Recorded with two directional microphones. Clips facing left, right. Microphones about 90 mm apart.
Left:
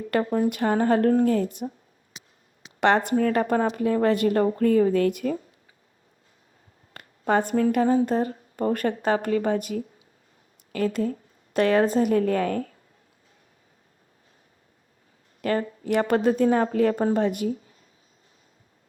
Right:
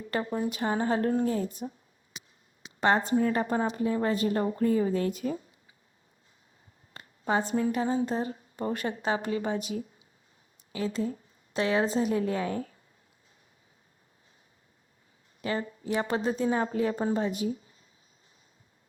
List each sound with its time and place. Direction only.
0.0 s speech: 55° left (ahead or behind)
2.8 s speech: 60° left (ahead or behind)
6.9 s a woman's voice: 55° left (ahead or behind)
15.4 s speech: 55° left (ahead or behind)